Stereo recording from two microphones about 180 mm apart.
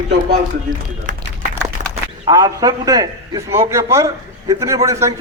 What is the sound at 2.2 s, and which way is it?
A man's voice, 20° right (ahead or behind).